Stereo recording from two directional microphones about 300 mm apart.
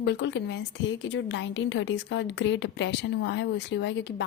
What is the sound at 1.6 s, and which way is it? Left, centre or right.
Speech, left.